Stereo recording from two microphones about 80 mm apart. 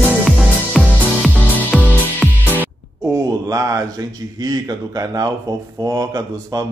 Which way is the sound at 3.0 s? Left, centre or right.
Right.